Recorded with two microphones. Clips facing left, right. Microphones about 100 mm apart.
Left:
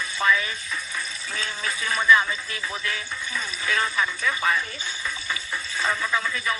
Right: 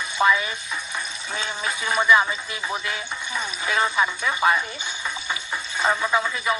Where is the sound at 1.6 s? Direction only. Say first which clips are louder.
Right 1 dB; 20° right (ahead or behind).